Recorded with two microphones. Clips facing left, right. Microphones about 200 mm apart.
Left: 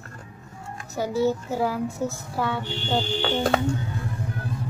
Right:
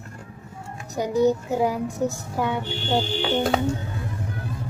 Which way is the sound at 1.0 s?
15° right (ahead or behind).